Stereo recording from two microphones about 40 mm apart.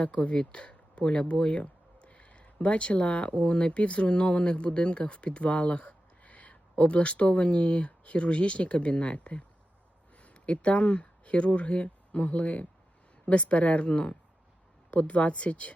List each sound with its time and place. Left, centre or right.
0.0 s speech: left
14.8 s speech: left